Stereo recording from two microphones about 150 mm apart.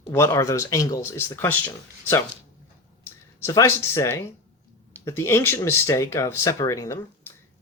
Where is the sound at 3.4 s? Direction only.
20° left (ahead or behind).